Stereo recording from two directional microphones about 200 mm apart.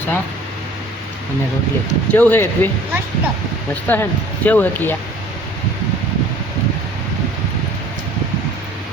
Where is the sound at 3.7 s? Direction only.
10° left (ahead or behind).